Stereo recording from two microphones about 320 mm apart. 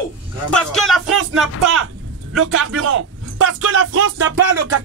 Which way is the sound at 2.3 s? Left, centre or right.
Right.